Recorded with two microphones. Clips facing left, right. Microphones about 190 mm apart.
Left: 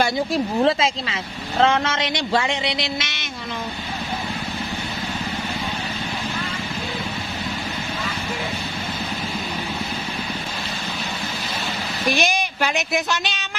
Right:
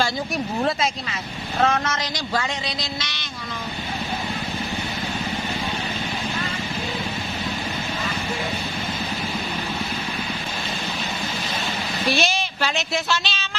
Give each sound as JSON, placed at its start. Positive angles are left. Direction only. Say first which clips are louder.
{"t": 0.0, "sound": "speech", "louder": "left 4 dB", "side_deg": 25}
{"t": 12.1, "sound": "speech", "louder": "left 2 dB", "side_deg": 15}